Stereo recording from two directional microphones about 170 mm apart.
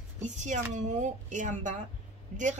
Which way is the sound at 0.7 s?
45° right (ahead or behind).